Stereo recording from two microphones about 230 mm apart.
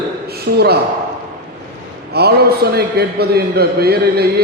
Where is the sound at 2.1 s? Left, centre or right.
Right.